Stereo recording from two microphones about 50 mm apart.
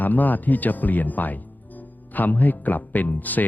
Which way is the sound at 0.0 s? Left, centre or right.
Left.